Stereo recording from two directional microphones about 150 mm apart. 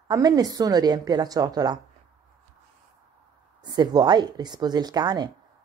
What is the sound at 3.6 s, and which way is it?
A woman's voice, 30° right (ahead or behind).